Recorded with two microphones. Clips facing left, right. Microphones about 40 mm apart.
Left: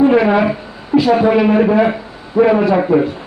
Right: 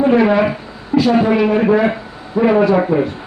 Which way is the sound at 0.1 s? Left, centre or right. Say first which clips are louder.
Left 1 dB; centre.